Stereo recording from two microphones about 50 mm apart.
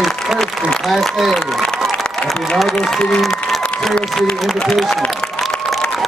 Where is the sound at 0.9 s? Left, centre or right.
Centre.